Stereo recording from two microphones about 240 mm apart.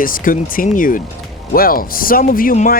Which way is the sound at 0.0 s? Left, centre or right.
Left.